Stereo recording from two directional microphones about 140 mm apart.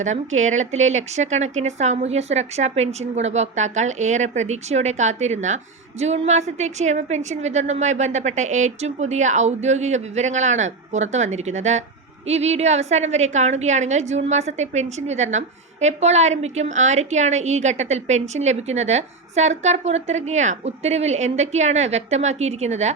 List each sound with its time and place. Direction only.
0.0 s a woman's voice: 60° right (ahead or behind)